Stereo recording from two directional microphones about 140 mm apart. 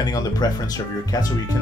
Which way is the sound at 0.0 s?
25° left (ahead or behind).